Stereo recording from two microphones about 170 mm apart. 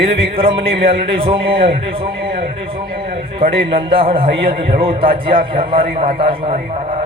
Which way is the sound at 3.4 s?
35° right (ahead or behind).